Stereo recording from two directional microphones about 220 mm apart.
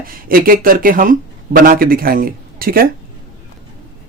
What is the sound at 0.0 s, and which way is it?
Speech, 40° right (ahead or behind).